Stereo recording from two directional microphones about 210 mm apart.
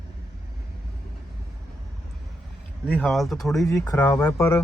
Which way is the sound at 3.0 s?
Centre (ahead or behind).